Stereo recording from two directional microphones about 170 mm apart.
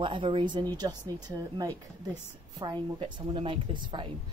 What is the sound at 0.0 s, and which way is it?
Speech, 30° right (ahead or behind).